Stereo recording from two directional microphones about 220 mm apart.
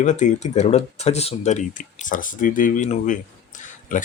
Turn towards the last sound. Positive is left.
turn(degrees=35)  # may be behind; listen again after turning